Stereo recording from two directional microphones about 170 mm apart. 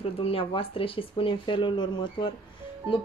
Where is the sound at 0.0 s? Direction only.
35° left (ahead or behind).